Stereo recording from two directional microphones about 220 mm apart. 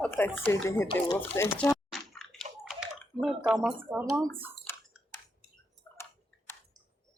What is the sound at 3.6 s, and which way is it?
Speech, 5° right (ahead or behind).